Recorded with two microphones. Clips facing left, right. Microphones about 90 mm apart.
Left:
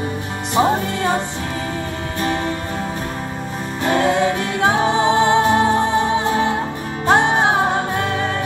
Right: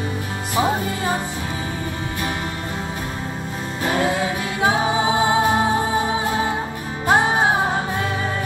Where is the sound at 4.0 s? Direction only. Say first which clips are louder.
Left 4 dB; 5° right (ahead or behind).